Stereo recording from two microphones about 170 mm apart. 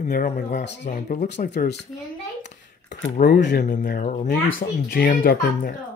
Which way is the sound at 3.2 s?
80° left.